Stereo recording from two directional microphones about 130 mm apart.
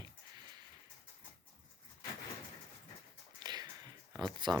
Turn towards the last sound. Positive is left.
turn(degrees=-35)  # may be behind; listen again after turning